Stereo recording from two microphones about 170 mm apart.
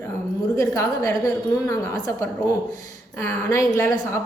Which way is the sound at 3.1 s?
15° left (ahead or behind).